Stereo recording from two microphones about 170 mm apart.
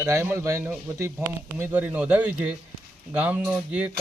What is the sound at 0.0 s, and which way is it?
Speech, 15° right (ahead or behind).